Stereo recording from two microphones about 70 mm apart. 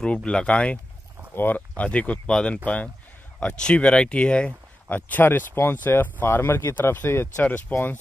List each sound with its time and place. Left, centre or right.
0.0 s speech: centre
4.8 s speech: left